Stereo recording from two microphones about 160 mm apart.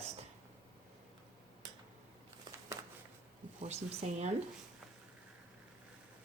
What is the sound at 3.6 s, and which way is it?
Speech, 40° right (ahead or behind).